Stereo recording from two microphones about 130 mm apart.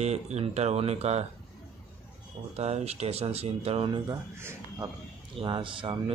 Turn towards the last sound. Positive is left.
turn(degrees=-40)  # may be behind; listen again after turning